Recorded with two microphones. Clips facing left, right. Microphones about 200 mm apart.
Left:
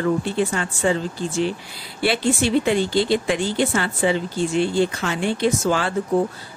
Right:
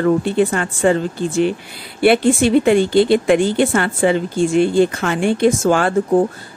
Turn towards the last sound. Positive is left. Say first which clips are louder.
# right 6 dB
turn(degrees=-50)  # may be behind; listen again after turning